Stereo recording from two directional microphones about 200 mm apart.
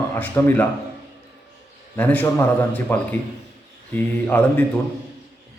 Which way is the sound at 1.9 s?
10° left (ahead or behind).